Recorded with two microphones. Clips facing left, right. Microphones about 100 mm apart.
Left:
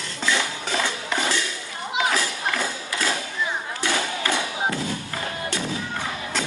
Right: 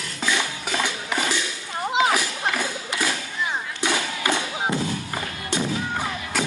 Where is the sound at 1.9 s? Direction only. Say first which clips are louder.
Right 2 dB; 15° right (ahead or behind).